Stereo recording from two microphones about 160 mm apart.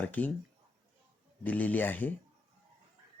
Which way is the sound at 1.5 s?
10° left (ahead or behind).